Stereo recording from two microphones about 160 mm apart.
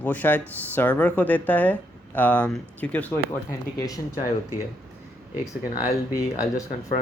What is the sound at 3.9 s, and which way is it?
Speech, 20° left (ahead or behind).